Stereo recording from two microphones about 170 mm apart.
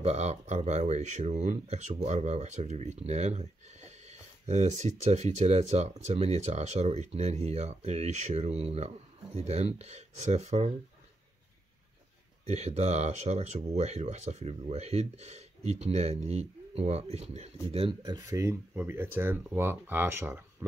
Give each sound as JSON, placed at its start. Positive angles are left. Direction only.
{"t": 0.0, "sound": "speech", "side_deg": -40}
{"t": 12.4, "sound": "speech", "side_deg": -40}